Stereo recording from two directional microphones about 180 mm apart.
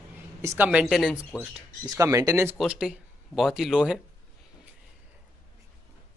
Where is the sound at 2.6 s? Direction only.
5° right (ahead or behind).